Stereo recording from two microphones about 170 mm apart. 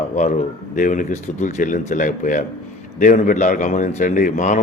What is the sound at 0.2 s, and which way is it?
A man's voice, 45° left (ahead or behind).